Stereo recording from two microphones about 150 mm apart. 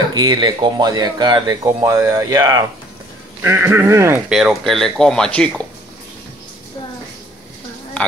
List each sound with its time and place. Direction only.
0.1 s speech: 25° right (ahead or behind)
4.3 s speech: centre (ahead or behind)